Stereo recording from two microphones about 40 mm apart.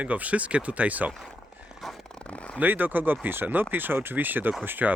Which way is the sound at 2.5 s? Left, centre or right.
Right.